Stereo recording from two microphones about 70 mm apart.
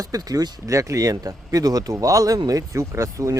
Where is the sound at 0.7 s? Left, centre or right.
Right.